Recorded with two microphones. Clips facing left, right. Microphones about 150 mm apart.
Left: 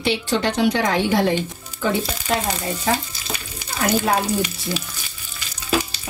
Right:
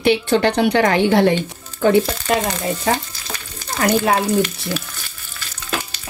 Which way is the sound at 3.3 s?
10° left (ahead or behind).